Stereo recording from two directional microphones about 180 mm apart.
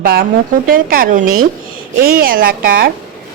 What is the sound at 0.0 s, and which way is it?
A woman's voice, 55° right (ahead or behind).